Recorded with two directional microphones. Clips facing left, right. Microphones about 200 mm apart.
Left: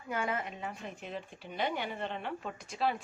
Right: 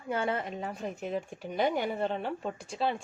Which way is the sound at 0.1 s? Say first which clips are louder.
Right 4 dB; 30° right (ahead or behind).